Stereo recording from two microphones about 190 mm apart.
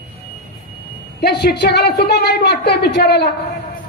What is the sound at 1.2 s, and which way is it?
A woman's voice, 60° left (ahead or behind).